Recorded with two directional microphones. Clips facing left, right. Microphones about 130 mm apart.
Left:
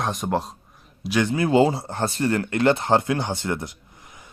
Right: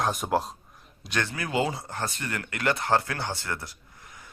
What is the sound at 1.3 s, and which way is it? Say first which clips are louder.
A man's voice: left 11 dB; 25° left (ahead or behind).